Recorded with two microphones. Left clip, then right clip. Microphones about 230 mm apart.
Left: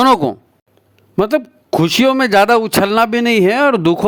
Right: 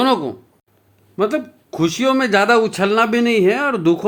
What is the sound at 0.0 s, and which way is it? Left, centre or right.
Speech, left.